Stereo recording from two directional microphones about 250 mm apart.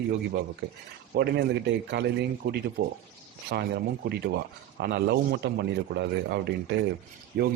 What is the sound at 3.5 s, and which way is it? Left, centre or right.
A man's voice, right.